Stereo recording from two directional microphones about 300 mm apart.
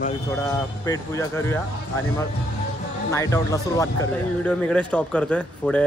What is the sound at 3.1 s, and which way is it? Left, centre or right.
Speech, centre.